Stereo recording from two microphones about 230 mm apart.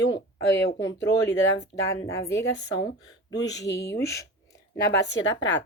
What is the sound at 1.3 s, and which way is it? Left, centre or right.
Speech, left.